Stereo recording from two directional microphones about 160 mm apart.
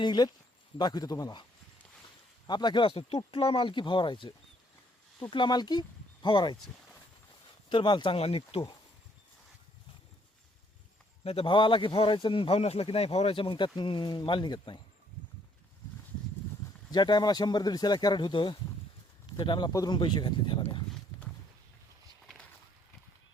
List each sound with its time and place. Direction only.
0.0 s speech: 25° left (ahead or behind)
2.5 s a man's voice: 30° left (ahead or behind)
7.7 s a man's voice: 30° left (ahead or behind)
11.2 s a man's voice: 35° left (ahead or behind)
16.9 s speech: 25° left (ahead or behind)